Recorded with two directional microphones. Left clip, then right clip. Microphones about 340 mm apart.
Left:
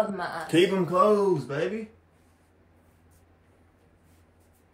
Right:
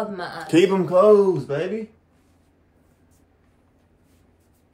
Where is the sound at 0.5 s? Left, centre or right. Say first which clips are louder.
Right 6 dB; centre.